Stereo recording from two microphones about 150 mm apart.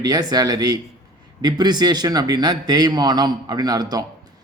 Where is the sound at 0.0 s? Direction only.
25° right (ahead or behind).